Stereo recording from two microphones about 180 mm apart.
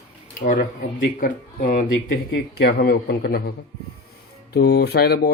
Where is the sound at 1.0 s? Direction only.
50° left (ahead or behind).